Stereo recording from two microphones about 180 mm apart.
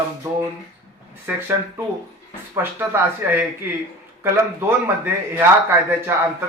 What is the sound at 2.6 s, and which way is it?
Speech, 10° right (ahead or behind).